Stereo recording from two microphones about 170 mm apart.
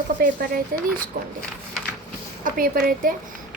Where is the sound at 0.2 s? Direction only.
55° right (ahead or behind).